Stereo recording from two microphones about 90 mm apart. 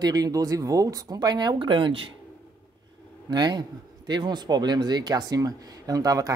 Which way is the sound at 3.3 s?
50° right (ahead or behind).